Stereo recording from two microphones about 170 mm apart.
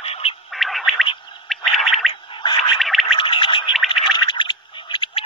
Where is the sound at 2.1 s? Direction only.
30° left (ahead or behind).